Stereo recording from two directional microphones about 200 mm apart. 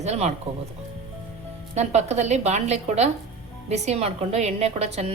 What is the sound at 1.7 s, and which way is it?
A woman's voice, 35° right (ahead or behind).